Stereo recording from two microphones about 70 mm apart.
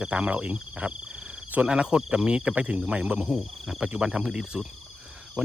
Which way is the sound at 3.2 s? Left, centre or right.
Centre.